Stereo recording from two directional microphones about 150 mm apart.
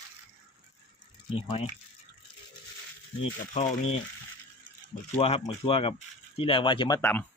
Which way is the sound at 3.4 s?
50° left (ahead or behind).